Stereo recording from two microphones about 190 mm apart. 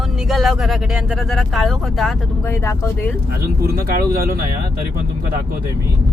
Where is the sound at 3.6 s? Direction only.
50° right (ahead or behind).